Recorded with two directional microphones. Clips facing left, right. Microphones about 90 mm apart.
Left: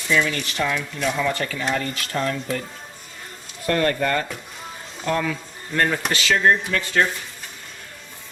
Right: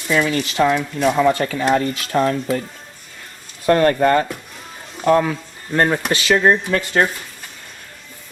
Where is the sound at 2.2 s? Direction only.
40° right (ahead or behind).